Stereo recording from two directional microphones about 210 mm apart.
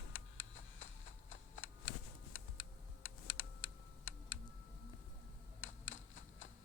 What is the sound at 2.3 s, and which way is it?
Computer keyboard, 65° left (ahead or behind).